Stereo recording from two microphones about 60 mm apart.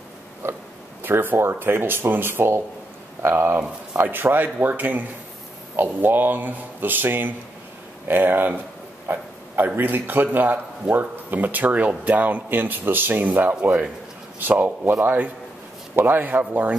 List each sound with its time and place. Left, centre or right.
1.0 s speech: right
9.0 s a sound: right
9.8 s speech: right